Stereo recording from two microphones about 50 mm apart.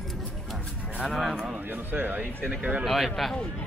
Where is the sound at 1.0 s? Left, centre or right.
Centre.